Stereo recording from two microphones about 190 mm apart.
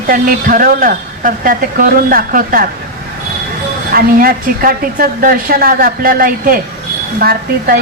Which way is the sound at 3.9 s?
50° right (ahead or behind).